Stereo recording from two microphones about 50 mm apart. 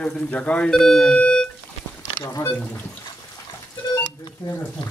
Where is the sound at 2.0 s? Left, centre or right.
Left.